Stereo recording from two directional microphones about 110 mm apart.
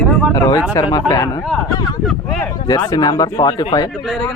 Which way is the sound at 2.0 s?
Centre (ahead or behind).